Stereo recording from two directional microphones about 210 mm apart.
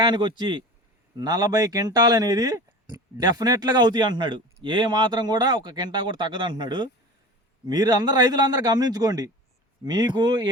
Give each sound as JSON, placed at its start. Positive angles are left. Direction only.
{"t": 0.0, "sound": "speech", "side_deg": -20}